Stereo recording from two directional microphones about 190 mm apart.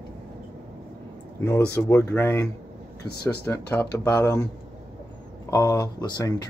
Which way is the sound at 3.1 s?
55° left (ahead or behind).